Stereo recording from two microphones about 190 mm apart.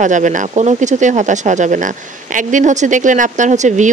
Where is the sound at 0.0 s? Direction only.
40° right (ahead or behind).